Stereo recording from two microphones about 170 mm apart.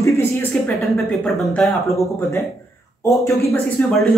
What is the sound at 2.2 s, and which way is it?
Speech, 15° left (ahead or behind).